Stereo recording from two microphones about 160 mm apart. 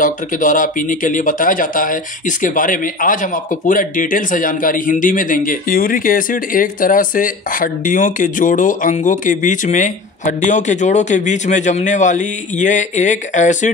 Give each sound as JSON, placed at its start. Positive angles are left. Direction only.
{"t": 0.0, "sound": "speech", "side_deg": 55}